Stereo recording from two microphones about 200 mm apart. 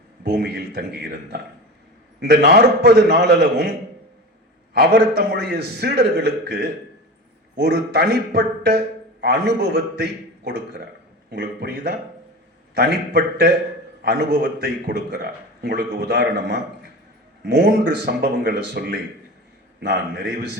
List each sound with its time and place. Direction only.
0.3 s a man's voice: 50° right (ahead or behind)
4.9 s a man's voice: 55° right (ahead or behind)